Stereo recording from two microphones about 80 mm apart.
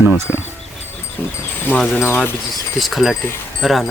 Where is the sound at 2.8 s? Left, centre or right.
Centre.